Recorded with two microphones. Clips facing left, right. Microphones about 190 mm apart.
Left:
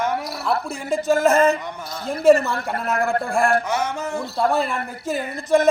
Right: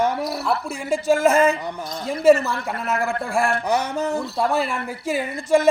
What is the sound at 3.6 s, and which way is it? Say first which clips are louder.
Music: right 2 dB; 35° right (ahead or behind).